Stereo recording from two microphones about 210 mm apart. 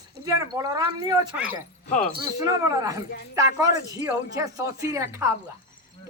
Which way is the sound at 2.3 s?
15° right (ahead or behind).